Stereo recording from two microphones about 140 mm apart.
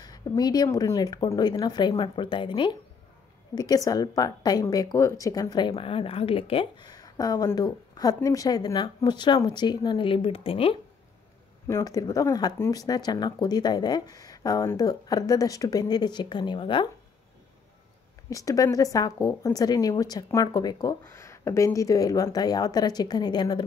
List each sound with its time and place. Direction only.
0.0 s a woman's voice: 30° left (ahead or behind)
11.6 s a woman's voice: 20° left (ahead or behind)
18.3 s a woman's voice: 25° left (ahead or behind)